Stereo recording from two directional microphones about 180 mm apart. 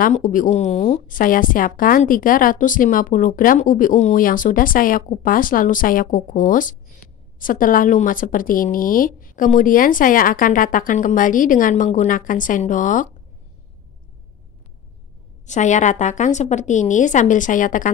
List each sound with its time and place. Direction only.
0.0 s a woman's voice: 45° left (ahead or behind)
15.4 s a woman's voice: 40° left (ahead or behind)